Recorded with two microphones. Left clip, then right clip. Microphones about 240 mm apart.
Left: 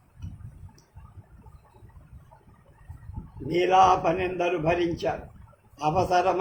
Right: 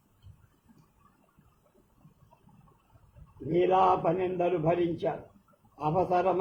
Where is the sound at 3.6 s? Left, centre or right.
Left.